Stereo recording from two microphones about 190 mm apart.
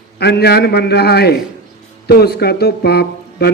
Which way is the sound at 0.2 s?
60° left (ahead or behind).